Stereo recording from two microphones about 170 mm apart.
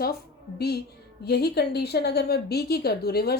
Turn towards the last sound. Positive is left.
turn(degrees=65)  # may be behind; listen again after turning